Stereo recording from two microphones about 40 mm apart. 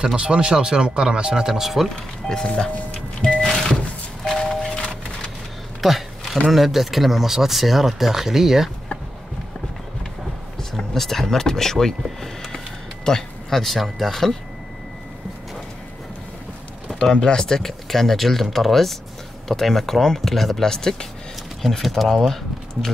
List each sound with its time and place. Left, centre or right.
0.0 s speech: right; by 1.9 s centre
2.2 s speech: left
3.2 s music: left
3.4 s music: centre
4.3 s a sound: centre
5.8 s speech: centre
10.8 s speech: centre
17.0 s speech: left; by 22.3 s centre